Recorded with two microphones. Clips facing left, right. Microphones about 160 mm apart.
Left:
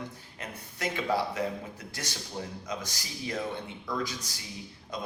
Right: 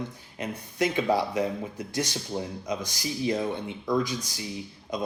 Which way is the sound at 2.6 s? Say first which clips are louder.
Right 6 dB; 15° right (ahead or behind).